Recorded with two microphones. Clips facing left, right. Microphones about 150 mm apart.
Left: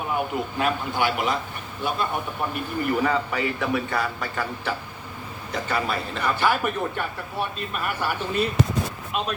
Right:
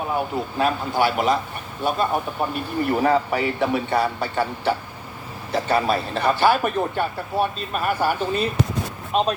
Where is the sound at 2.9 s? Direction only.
35° right (ahead or behind).